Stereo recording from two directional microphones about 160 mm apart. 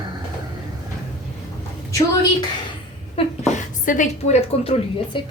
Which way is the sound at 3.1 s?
45° left (ahead or behind).